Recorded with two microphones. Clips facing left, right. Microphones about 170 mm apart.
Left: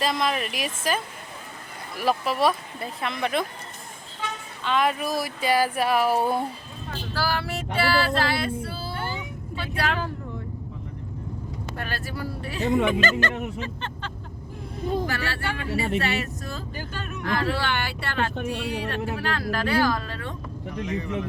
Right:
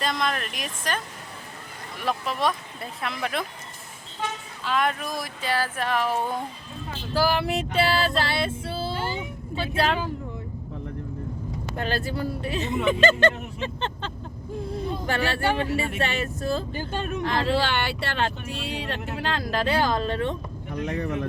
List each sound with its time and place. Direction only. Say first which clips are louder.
0.0 s speech: left 2 dB; 5° left (ahead or behind)
4.6 s speech: left 2 dB; centre (ahead or behind)
7.1 s speech: right 5 dB; 15° right (ahead or behind)
7.8 s female singing: left 1 dB; 20° right (ahead or behind)
9.6 s speech: right 3 dB; 25° right (ahead or behind)
11.8 s speech: right 6 dB; 25° right (ahead or behind)